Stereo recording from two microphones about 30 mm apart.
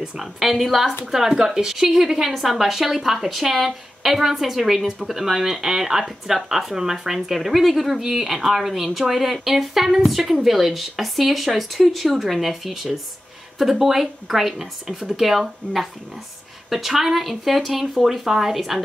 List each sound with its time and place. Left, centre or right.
0.2 s speech: centre